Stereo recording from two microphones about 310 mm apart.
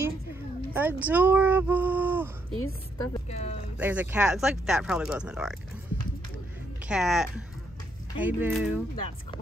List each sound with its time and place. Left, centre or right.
0.0 s speech: centre
3.0 s speech: centre
3.7 s speech: centre
6.9 s speech: centre